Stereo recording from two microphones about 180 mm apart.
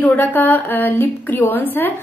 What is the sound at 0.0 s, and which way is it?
A woman's voice, 10° left (ahead or behind).